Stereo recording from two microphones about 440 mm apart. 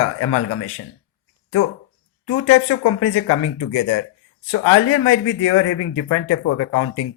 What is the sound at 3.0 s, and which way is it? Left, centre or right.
Speech, left.